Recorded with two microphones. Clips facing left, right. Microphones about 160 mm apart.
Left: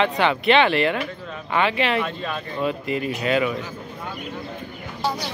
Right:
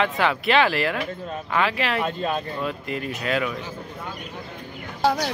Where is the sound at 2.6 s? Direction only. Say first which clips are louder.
Left 4 dB; centre (ahead or behind).